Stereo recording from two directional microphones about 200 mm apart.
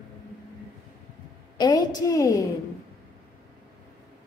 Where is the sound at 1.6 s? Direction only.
20° left (ahead or behind).